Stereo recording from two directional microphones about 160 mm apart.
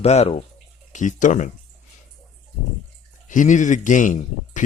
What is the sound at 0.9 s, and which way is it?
Speech, 50° left (ahead or behind).